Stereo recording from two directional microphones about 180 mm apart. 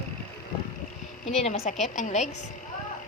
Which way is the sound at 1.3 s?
35° left (ahead or behind).